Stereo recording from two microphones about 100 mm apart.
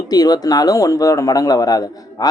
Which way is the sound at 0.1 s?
40° left (ahead or behind).